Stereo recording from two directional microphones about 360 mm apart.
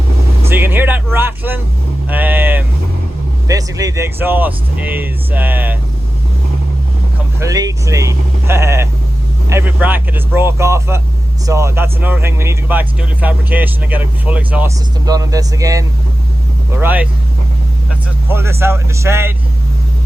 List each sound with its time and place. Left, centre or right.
0.4 s speech: centre
7.3 s speech: centre
18.3 s speech: centre